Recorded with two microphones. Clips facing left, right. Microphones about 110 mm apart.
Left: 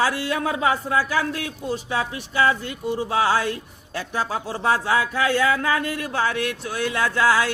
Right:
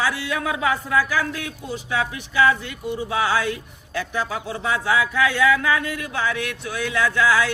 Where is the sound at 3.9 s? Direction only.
40° left (ahead or behind).